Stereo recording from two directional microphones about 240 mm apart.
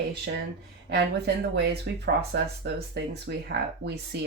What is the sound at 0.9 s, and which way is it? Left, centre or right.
Speech, right.